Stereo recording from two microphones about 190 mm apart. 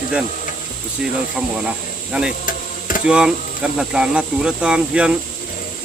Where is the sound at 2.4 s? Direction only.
45° left (ahead or behind).